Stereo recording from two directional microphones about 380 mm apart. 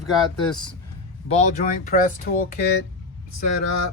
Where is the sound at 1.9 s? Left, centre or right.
Left.